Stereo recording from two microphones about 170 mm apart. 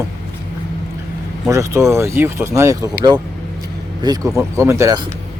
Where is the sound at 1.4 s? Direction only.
15° right (ahead or behind).